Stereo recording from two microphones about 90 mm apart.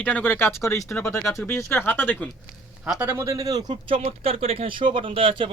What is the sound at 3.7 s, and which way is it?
Speech, 85° right.